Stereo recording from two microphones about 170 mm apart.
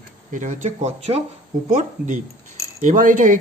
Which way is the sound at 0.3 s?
45° right (ahead or behind).